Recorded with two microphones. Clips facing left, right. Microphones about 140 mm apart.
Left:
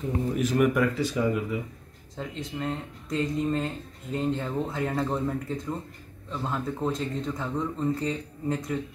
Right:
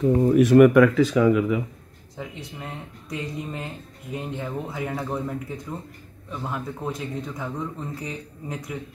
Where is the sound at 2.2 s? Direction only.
10° right (ahead or behind).